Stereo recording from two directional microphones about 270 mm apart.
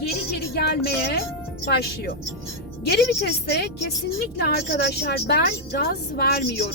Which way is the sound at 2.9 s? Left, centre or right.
Left.